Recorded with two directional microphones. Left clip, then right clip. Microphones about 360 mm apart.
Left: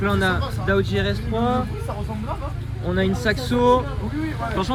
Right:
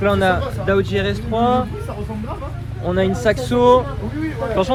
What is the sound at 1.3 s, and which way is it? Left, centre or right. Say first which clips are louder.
Speech: right 7 dB; right.